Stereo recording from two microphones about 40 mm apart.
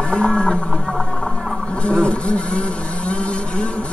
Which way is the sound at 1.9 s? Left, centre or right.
Left.